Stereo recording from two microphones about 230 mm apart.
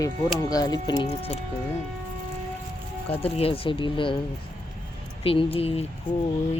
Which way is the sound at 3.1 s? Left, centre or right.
Left.